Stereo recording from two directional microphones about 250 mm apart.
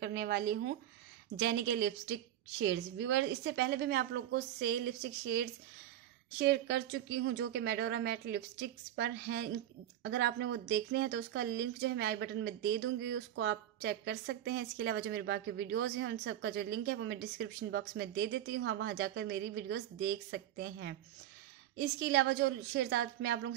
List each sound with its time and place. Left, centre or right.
0.0 s a woman's voice: right